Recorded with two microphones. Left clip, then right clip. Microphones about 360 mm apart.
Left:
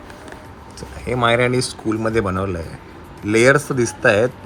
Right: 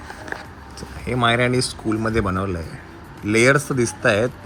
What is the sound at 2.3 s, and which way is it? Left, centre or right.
Speech, left.